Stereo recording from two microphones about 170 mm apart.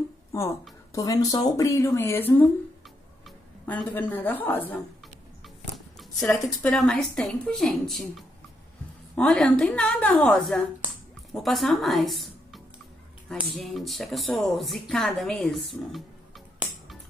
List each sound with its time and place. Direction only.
0.3 s a woman's voice: 20° left (ahead or behind)
6.2 s a woman's voice: 5° left (ahead or behind)